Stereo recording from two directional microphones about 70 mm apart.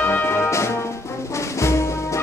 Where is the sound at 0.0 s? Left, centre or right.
Left.